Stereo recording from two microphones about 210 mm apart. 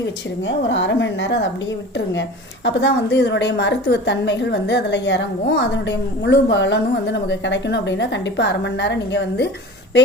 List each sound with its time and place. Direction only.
0.4 s a woman's voice: 60° left (ahead or behind)
2.6 s a woman's voice: 55° left (ahead or behind)